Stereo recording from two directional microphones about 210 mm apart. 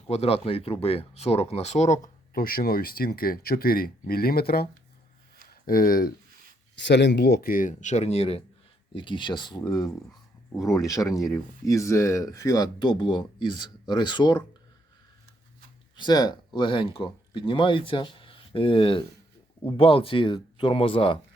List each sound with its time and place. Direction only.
0.1 s speech: 30° left (ahead or behind)
6.7 s speech: 55° left (ahead or behind); by 14.4 s 20° left (ahead or behind)
16.0 s speech: 20° left (ahead or behind)